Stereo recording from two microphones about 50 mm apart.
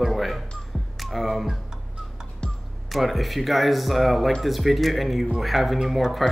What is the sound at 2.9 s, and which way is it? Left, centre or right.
Speech, centre.